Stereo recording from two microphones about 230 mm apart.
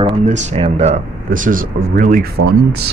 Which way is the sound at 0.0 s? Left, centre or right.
Right.